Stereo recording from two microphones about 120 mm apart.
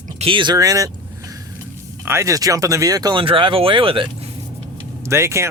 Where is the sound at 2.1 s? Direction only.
25° right (ahead or behind); by 4.1 s 45° right (ahead or behind).